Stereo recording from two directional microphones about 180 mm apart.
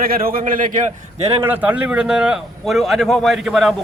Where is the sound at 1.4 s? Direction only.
10° right (ahead or behind).